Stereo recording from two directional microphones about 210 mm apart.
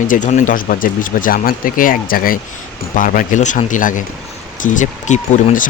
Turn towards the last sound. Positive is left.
turn(degrees=35)  # may be behind; listen again after turning